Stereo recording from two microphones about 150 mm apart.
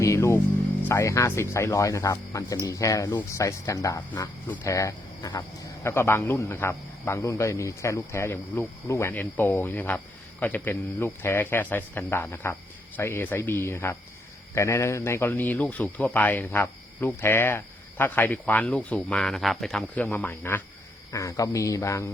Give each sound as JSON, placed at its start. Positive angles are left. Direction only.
{"t": 0.0, "sound": "music", "side_deg": 20}
{"t": 0.9, "sound": "speech", "side_deg": 15}